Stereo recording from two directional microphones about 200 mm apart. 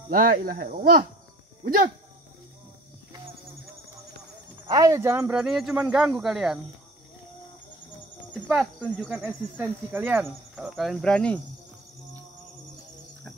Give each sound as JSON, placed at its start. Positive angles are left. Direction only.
{"t": 0.1, "sound": "speech", "side_deg": -45}
{"t": 4.6, "sound": "speech", "side_deg": -15}
{"t": 8.3, "sound": "speech", "side_deg": -5}